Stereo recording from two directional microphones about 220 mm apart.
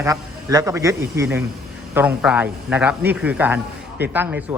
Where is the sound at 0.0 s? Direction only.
15° right (ahead or behind).